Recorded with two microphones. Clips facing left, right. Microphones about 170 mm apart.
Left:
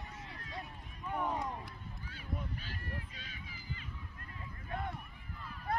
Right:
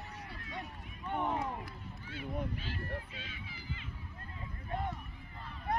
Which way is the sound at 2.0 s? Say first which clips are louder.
Right 5 dB; 40° left (ahead or behind).